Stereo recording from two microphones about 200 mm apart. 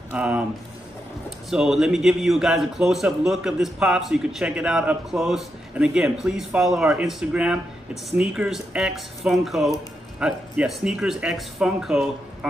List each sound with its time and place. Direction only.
0.1 s speech: 5° right (ahead or behind)
1.5 s a man's voice: centre (ahead or behind)